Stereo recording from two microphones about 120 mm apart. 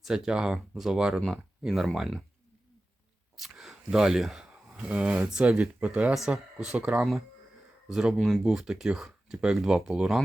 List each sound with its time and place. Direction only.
0.0 s speech: 5° right (ahead or behind)
3.3 s speech: centre (ahead or behind)